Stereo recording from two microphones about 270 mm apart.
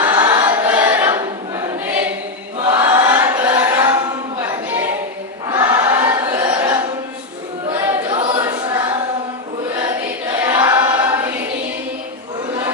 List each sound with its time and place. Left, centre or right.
0.0 s choir: centre
2.7 s chant: centre
5.5 s choir: centre
10.4 s choir: centre